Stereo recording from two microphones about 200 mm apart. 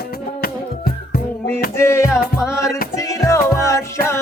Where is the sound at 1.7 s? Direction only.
15° left (ahead or behind).